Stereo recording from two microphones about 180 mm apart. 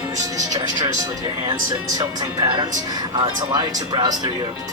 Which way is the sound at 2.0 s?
25° right (ahead or behind).